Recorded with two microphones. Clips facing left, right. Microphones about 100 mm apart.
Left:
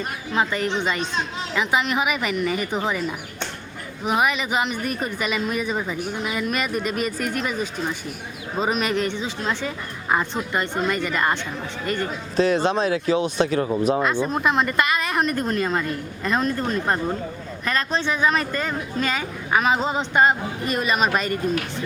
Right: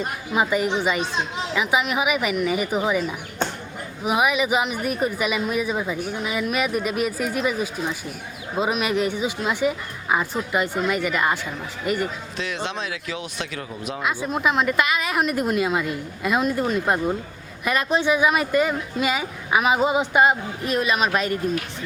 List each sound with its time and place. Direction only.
0.3 s speech: 10° right (ahead or behind)
12.4 s speech: 40° left (ahead or behind)
14.0 s speech: 5° right (ahead or behind)